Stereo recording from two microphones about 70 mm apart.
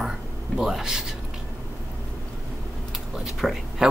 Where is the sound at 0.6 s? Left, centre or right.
Centre.